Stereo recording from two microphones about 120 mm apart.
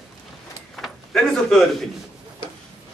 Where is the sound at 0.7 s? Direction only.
Centre (ahead or behind).